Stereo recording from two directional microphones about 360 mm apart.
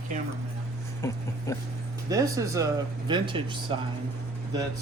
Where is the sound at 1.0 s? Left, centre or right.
Centre.